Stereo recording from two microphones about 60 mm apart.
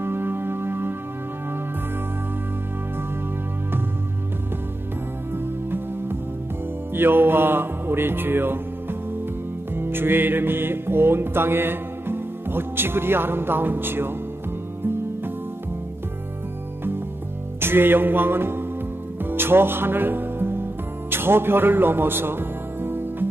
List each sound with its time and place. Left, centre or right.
0.0 s music: right
5.3 s music: right
9.8 s music: right
17.6 s music: right
21.1 s speech: right